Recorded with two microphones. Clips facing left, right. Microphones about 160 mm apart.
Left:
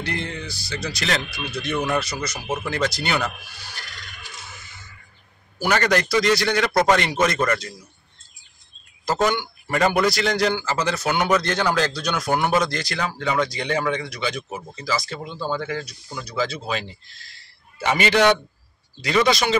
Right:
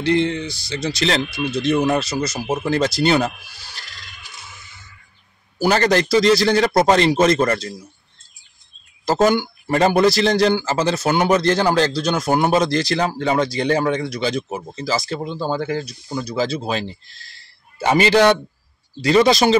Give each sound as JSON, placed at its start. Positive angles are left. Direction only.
{"t": 0.0, "sound": "speech", "side_deg": -25}
{"t": 5.6, "sound": "a man's voice", "side_deg": -30}
{"t": 9.0, "sound": "a man's voice", "side_deg": -35}